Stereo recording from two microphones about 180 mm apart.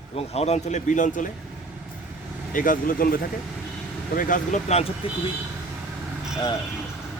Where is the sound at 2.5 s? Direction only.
50° left (ahead or behind).